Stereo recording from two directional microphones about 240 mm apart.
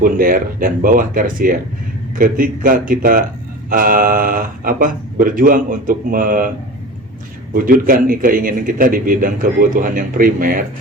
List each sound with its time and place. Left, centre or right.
0.0 s a man's voice: right
7.5 s a man's voice: right